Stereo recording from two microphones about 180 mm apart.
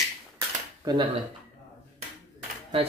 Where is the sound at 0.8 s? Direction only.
25° right (ahead or behind).